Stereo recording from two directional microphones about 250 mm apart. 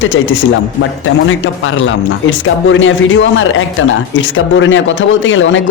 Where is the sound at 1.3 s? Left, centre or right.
Left.